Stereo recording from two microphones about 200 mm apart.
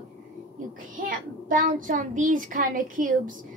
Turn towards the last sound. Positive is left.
turn(degrees=-40)  # may be behind; listen again after turning